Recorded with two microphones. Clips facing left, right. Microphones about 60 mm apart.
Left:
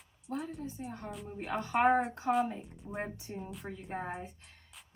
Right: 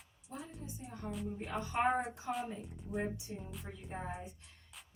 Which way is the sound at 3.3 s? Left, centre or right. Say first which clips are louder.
Left 4 dB; left.